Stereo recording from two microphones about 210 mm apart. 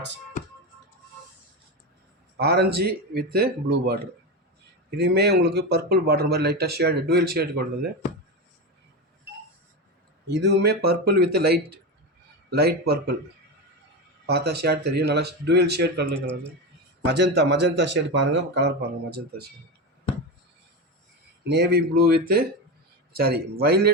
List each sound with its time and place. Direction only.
2.4 s speech: 50° right (ahead or behind)
10.2 s speech: 55° right (ahead or behind)
14.3 s speech: 50° right (ahead or behind)
16.1 s speech: 5° left (ahead or behind)
17.1 s a man's voice: 55° right (ahead or behind)
21.4 s speech: 55° right (ahead or behind)